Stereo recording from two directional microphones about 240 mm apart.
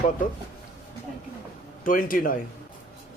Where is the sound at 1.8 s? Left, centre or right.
Left.